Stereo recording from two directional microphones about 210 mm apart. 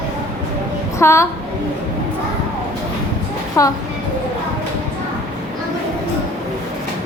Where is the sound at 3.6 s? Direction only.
15° left (ahead or behind).